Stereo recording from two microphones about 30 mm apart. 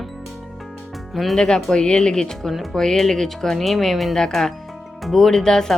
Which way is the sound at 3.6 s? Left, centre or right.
Centre.